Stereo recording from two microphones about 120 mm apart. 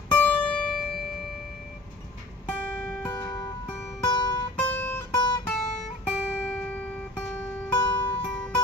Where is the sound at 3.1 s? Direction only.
20° left (ahead or behind).